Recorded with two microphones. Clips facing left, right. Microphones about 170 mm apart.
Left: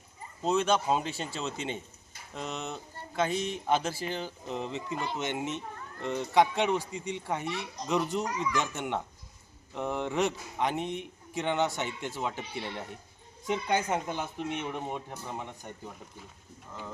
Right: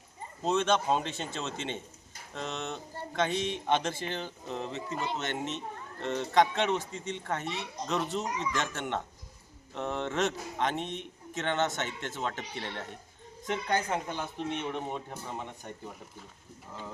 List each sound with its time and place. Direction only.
0.4 s speech: 10° left (ahead or behind)
4.9 s speech: 20° right (ahead or behind)
5.2 s speech: 15° left (ahead or behind)
7.4 s speech: 20° right (ahead or behind)
7.9 s speech: 10° left (ahead or behind)
8.2 s speech: 20° right (ahead or behind)
8.5 s speech: 10° left (ahead or behind)